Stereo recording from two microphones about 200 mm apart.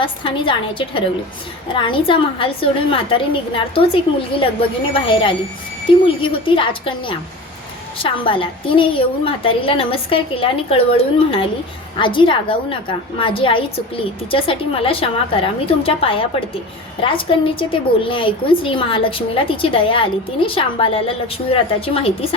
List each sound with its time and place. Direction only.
0.0 s a woman's voice: 25° left (ahead or behind)